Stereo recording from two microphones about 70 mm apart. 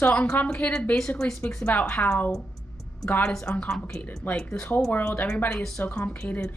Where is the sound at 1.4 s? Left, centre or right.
Left.